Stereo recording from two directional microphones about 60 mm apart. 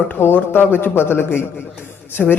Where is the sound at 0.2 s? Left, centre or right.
Left.